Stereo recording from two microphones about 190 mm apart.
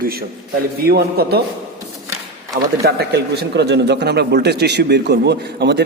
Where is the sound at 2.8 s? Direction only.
60° right (ahead or behind).